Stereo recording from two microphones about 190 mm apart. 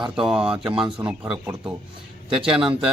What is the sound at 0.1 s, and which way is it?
Speech, 5° right (ahead or behind).